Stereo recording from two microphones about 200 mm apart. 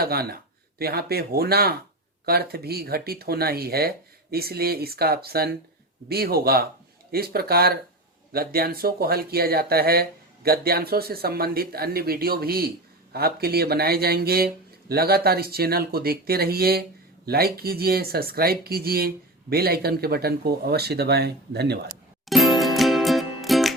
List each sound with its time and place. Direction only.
0.0 s speech: 50° right (ahead or behind)
22.3 s music: centre (ahead or behind)